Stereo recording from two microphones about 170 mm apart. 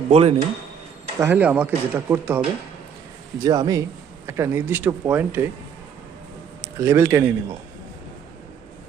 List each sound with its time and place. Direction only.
0.1 s speech: 40° right (ahead or behind)
1.2 s speech: 10° right (ahead or behind)
3.4 s speech: 20° right (ahead or behind)
6.6 s a man's voice: 15° right (ahead or behind)